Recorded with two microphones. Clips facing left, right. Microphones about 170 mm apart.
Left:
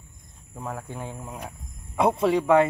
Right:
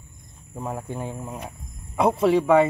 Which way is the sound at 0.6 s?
15° right (ahead or behind).